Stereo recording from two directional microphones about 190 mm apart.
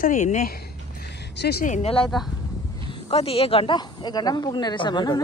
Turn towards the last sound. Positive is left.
turn(degrees=20)  # may be behind; listen again after turning